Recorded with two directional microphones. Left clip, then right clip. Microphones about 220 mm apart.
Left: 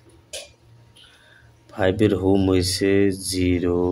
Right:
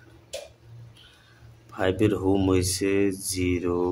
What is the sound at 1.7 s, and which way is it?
Speech, 20° left (ahead or behind).